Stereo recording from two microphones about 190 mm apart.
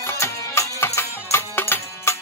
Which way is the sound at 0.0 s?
15° left (ahead or behind).